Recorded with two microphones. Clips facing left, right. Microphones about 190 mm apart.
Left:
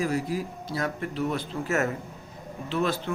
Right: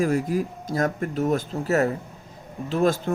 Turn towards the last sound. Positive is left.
turn(degrees=-45)  # may be behind; listen again after turning